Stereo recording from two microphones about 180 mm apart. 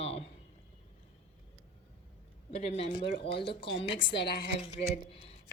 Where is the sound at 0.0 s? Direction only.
35° left (ahead or behind).